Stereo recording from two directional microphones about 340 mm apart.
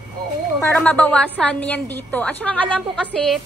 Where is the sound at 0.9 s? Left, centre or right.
Centre.